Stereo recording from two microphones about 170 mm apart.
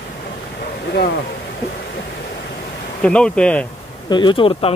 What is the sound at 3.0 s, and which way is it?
Speech, 5° left (ahead or behind).